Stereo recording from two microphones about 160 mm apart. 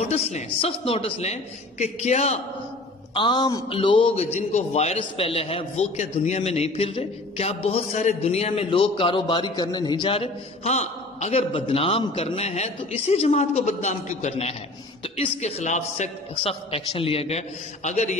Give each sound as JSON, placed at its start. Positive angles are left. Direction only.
{"t": 0.1, "sound": "a man's voice", "side_deg": 45}
{"t": 3.2, "sound": "a man's voice", "side_deg": 30}